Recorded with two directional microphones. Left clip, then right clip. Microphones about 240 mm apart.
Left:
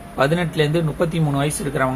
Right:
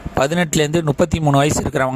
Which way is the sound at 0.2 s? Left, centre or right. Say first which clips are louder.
Right 2 dB; right.